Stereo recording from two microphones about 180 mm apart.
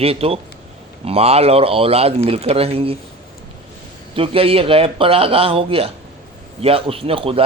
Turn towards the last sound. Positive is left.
turn(degrees=-30)  # may be behind; listen again after turning